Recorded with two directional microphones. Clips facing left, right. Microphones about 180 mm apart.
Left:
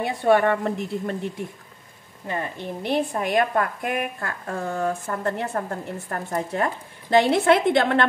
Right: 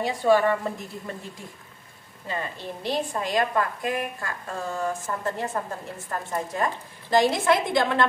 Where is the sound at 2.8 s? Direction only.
55° left (ahead or behind).